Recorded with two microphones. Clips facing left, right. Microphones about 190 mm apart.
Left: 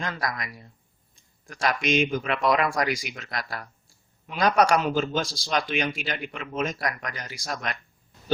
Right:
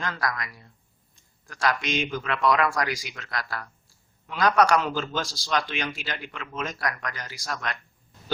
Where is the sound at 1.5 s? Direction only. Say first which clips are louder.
Left 2 dB; 20° left (ahead or behind).